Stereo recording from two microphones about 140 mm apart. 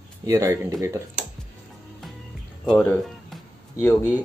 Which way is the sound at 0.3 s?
20° right (ahead or behind).